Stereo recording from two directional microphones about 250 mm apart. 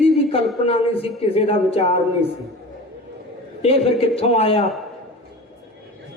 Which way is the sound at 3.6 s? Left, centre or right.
Left.